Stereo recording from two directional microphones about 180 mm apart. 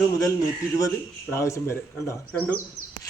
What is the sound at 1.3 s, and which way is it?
Speech, 15° left (ahead or behind).